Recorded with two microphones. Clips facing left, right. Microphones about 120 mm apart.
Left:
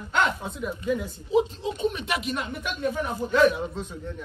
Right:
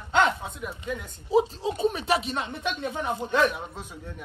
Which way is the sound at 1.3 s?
35° right (ahead or behind).